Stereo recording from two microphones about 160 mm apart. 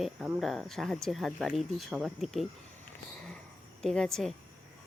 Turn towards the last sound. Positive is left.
turn(degrees=0)  # may be behind; listen again after turning